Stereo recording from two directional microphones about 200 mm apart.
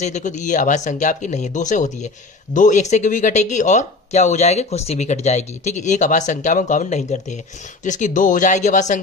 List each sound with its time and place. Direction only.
0.0 s speech: 35° left (ahead or behind)